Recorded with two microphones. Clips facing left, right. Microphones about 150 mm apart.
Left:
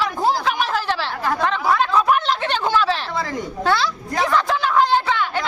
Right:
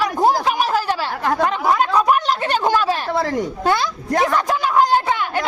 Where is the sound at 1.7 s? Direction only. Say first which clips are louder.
Right 1 dB; 15° right (ahead or behind).